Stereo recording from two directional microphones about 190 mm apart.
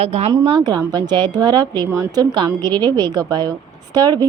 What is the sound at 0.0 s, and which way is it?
A woman's voice, 30° right (ahead or behind).